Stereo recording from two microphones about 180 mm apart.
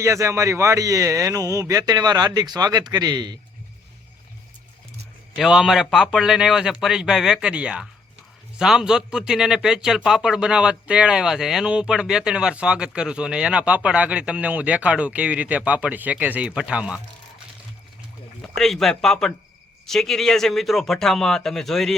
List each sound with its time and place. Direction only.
0.0 s a man's voice: 15° right (ahead or behind)
5.4 s speech: centre (ahead or behind)
18.5 s speech: centre (ahead or behind)